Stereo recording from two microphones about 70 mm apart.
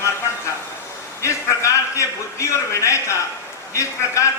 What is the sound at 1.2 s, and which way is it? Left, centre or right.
Speech, left.